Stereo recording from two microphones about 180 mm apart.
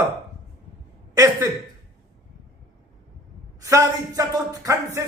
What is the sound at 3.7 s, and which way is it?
Speech, 20° right (ahead or behind).